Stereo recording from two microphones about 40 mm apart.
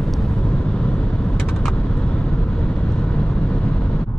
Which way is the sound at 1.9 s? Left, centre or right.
Left.